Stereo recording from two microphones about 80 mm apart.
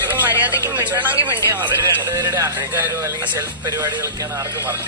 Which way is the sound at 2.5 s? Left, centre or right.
Right.